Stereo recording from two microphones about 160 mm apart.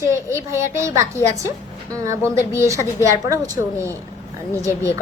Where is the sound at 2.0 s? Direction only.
15° right (ahead or behind).